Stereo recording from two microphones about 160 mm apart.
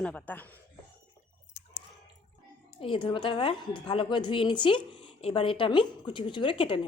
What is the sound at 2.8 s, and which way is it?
A woman's voice, 30° left (ahead or behind).